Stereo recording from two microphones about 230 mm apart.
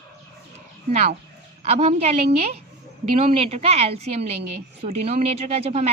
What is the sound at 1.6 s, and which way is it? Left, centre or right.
Speech, right.